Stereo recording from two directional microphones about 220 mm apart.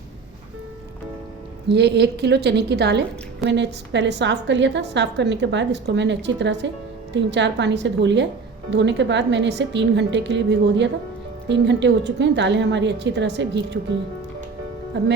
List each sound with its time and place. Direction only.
1.7 s a woman's voice: 50° right (ahead or behind)
14.9 s a woman's voice: 50° right (ahead or behind)